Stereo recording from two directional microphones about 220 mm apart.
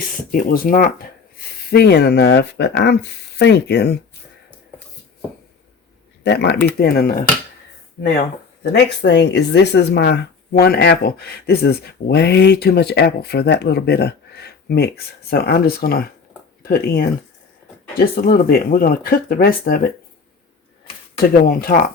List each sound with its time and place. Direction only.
0.3 s speech: 40° left (ahead or behind)
6.2 s speech: 50° left (ahead or behind)
8.7 s speech: 50° left (ahead or behind)
21.5 s speech: 40° left (ahead or behind)